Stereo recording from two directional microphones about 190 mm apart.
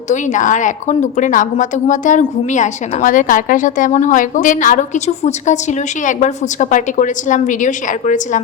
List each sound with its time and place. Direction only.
0.1 s a woman's voice: 40° left (ahead or behind)